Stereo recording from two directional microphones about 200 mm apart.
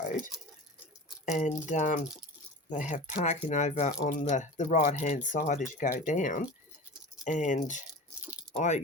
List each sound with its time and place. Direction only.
1.2 s speech: 35° left (ahead or behind)
8.2 s a sound: 5° right (ahead or behind)
8.5 s speech: 35° left (ahead or behind)